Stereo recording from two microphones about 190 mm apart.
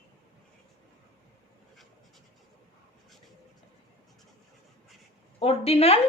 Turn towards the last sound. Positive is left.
turn(degrees=30)  # may be behind; listen again after turning